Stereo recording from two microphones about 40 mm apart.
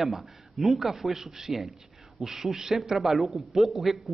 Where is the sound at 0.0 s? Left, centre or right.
Centre.